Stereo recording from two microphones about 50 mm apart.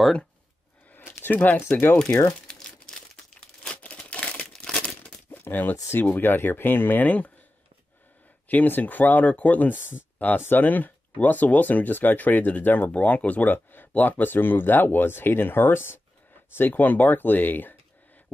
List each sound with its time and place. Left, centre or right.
0.9 s a sound: left
1.3 s speech: left
2.4 s crumpling: centre
3.7 s crumpling: left
5.3 s a sound: left
5.9 s speech: left
8.5 s speech: left
12.9 s speech: left